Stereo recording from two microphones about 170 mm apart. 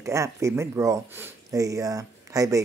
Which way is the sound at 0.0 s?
20° right (ahead or behind).